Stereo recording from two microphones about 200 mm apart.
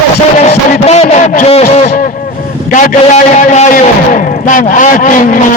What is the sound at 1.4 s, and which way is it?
Speech, 30° left (ahead or behind).